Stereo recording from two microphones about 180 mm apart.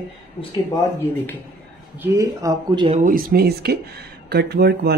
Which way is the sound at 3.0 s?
50° right (ahead or behind).